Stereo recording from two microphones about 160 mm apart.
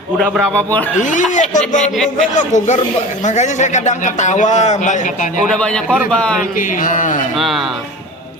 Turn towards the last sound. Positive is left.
turn(degrees=0)  # may be behind; listen again after turning